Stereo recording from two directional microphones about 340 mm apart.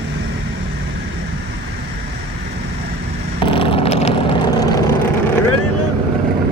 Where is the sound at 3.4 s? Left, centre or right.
Centre.